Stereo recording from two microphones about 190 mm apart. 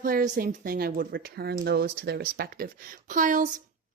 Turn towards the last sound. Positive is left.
turn(degrees=-45)  # may be behind; listen again after turning